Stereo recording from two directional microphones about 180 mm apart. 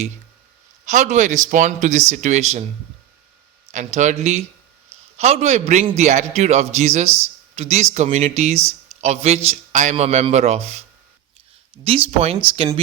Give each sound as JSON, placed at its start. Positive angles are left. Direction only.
{"t": 0.9, "sound": "a man's voice", "side_deg": -45}
{"t": 3.7, "sound": "a man's voice", "side_deg": -40}
{"t": 11.9, "sound": "a man's voice", "side_deg": -30}